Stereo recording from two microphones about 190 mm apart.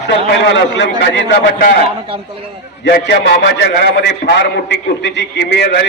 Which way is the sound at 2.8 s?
65° left (ahead or behind).